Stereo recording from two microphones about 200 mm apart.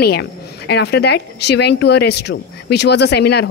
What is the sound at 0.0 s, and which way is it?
A woman's voice, 55° left (ahead or behind).